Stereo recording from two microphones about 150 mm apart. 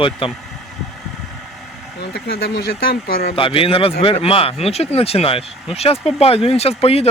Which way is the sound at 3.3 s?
35° left (ahead or behind).